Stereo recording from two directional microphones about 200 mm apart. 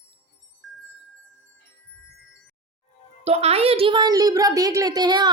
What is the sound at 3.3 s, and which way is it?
Speech, 30° right (ahead or behind).